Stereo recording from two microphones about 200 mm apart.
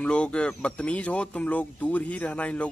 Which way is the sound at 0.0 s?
5° left (ahead or behind).